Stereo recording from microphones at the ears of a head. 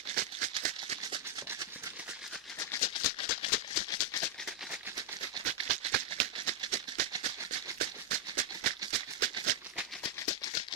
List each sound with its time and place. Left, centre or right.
0.1 s maraca: right
2.6 s maraca: left
4.9 s maraca: right
10.0 s maraca: left